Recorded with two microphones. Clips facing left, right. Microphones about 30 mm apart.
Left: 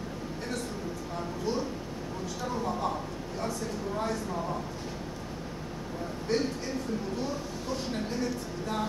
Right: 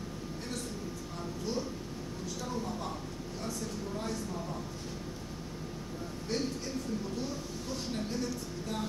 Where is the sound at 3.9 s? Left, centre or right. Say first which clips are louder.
Left 6 dB; centre.